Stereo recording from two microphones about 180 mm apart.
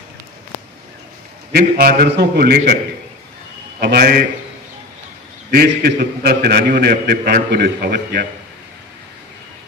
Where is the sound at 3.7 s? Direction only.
60° right (ahead or behind).